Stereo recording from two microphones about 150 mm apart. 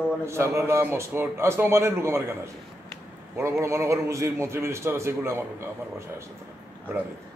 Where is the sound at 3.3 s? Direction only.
20° right (ahead or behind).